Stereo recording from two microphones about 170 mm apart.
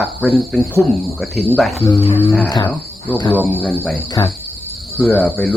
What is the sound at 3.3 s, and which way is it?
Speech, 10° left (ahead or behind).